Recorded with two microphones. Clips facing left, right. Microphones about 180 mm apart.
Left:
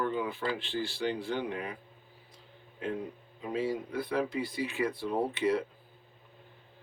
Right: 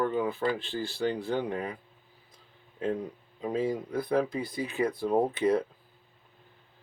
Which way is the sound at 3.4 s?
40° right (ahead or behind).